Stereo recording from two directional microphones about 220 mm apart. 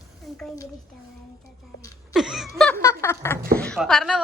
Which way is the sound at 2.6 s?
10° left (ahead or behind).